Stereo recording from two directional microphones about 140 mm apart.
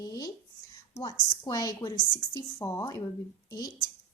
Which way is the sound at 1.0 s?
30° left (ahead or behind).